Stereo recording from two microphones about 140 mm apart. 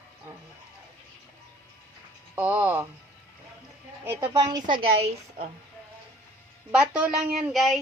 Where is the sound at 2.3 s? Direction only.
10° right (ahead or behind).